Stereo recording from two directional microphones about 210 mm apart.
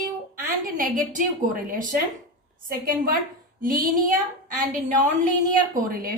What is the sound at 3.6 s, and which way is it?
A woman's voice, 40° right (ahead or behind).